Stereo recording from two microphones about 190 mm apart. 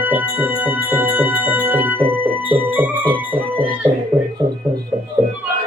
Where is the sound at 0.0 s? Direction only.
10° right (ahead or behind).